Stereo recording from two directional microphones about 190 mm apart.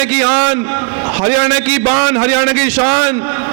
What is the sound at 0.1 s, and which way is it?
A man's voice, 15° right (ahead or behind).